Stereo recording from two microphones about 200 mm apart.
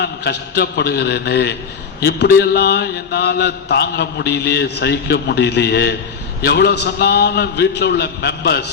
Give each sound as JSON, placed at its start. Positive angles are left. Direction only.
{"t": 0.0, "sound": "a man's voice", "side_deg": 50}